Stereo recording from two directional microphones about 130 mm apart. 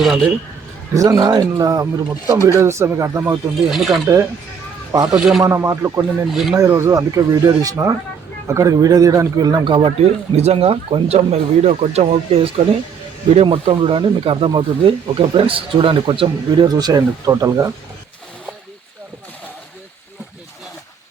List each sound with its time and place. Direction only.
0.0 s a sound: centre (ahead or behind)
0.9 s speech: 30° right (ahead or behind)
3.6 s speech: centre (ahead or behind)
4.9 s speech: 30° right (ahead or behind)
5.1 s speech: 5° right (ahead or behind)
5.4 s speech: 20° right (ahead or behind)
6.3 s speech: 5° right (ahead or behind)
6.6 s speech: 20° right (ahead or behind); by 9.9 s 40° right (ahead or behind)
10.0 s speech: 55° right (ahead or behind)
13.3 s speech: 50° right (ahead or behind); by 17.7 s 25° right (ahead or behind)